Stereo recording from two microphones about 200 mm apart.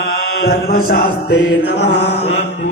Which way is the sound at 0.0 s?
50° left (ahead or behind).